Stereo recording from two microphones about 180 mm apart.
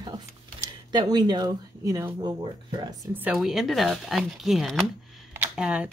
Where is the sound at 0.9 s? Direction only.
20° right (ahead or behind).